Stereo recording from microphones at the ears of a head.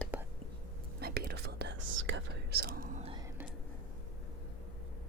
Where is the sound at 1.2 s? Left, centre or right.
Right.